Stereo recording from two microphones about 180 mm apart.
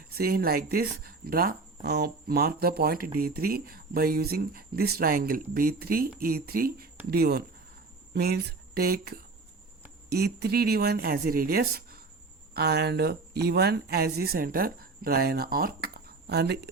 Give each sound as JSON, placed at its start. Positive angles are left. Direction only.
{"t": 0.2, "sound": "speech", "side_deg": -55}